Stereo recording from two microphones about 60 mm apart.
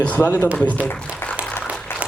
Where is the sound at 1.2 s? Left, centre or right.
Left.